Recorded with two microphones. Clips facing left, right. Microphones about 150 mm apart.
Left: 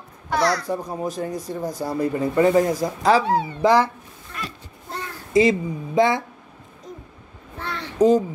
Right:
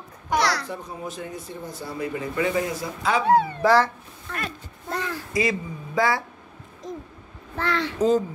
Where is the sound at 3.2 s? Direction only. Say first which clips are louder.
Right 3 dB; 55° right (ahead or behind).